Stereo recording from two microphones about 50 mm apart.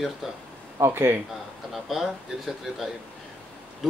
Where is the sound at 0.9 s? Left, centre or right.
Right.